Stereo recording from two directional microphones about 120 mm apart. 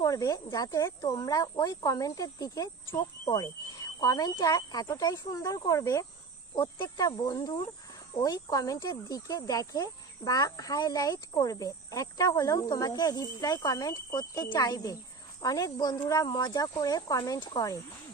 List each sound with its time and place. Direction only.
0.0 s speech: 30° left (ahead or behind)
6.6 s speech: 40° left (ahead or behind)